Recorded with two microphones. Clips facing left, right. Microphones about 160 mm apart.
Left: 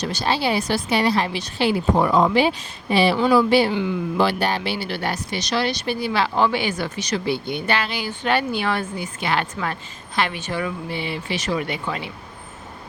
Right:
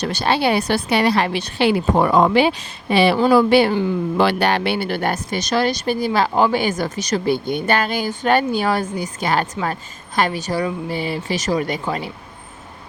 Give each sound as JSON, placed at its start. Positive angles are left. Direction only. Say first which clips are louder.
{"t": 0.0, "sound": "a woman's voice", "louder": "right 4 dB", "side_deg": -60}
{"t": 4.2, "sound": "speech", "louder": "right 4 dB", "side_deg": -70}